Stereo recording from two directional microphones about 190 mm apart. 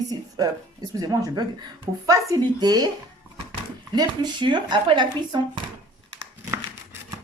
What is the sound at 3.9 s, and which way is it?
A woman's voice, 25° right (ahead or behind).